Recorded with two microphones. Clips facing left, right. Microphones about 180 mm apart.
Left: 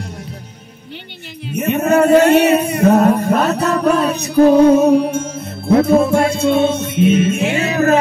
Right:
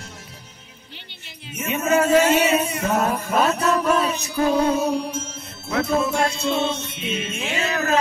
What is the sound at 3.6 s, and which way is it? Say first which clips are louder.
Music: left 5 dB; 60° left (ahead or behind).